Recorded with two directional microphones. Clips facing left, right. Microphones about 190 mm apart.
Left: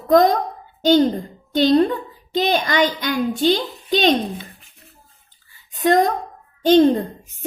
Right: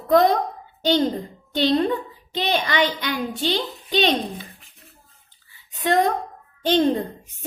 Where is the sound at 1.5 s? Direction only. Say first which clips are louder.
Left 5 dB; 45° left (ahead or behind).